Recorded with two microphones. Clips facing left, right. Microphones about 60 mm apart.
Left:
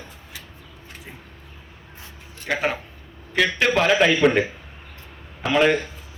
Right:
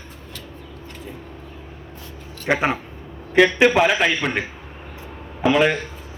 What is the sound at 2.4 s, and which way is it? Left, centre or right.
A man's voice, right.